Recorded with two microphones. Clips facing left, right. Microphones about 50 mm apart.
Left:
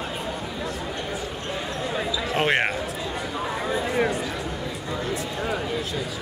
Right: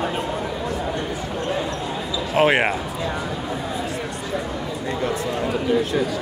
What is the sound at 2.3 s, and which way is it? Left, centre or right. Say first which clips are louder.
Speech: right 5 dB; centre.